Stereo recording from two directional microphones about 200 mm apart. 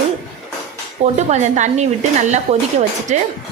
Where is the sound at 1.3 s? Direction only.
35° right (ahead or behind).